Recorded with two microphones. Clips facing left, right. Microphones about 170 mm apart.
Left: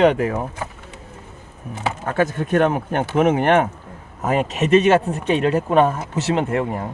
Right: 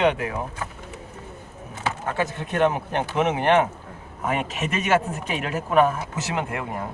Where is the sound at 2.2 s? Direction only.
50° left (ahead or behind).